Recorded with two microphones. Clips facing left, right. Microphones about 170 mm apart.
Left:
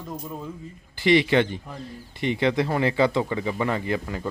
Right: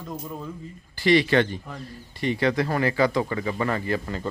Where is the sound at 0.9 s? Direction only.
20° left (ahead or behind).